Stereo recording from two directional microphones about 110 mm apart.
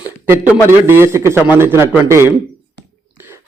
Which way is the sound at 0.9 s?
25° right (ahead or behind).